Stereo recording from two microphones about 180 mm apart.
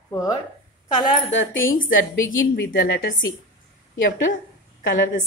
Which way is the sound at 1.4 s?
90° left.